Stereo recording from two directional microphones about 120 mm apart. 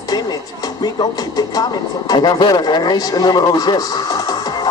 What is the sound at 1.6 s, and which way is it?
Speech, 35° left (ahead or behind).